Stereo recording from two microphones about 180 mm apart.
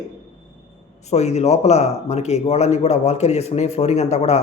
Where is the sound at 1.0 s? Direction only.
40° left (ahead or behind).